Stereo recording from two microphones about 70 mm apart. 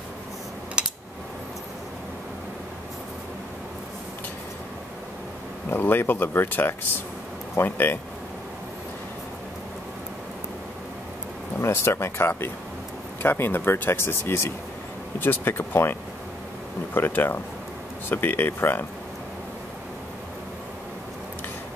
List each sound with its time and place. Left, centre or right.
0.8 s a sound: centre
5.7 s speech: left
11.6 s speech: left